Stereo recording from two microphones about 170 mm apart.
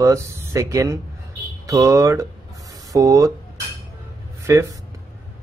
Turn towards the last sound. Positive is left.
turn(degrees=-15)  # may be behind; listen again after turning